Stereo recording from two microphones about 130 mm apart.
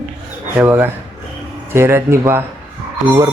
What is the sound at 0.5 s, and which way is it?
A man's voice, 15° right (ahead or behind).